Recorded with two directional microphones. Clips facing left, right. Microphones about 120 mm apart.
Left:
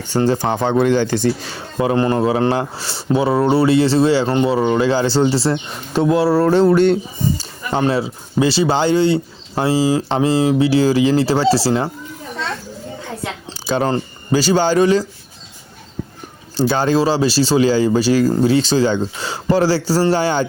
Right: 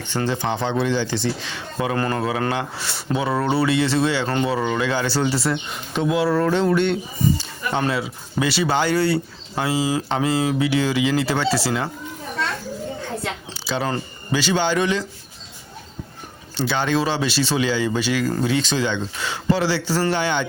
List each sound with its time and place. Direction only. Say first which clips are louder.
0.3 s a man's voice: left 4 dB; 45° left (ahead or behind)
7.8 s speech: left 6 dB; 30° left (ahead or behind)
9.6 s a man's voice: left 6 dB; 35° left (ahead or behind)
13.5 s a sound: left 8 dB; 45° left (ahead or behind)
13.8 s a man's voice: left 6 dB; 35° left (ahead or behind)
16.6 s a man's voice: left 6 dB; 40° left (ahead or behind)